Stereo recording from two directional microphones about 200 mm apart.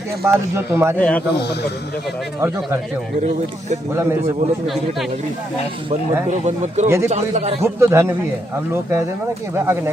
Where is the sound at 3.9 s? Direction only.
10° right (ahead or behind).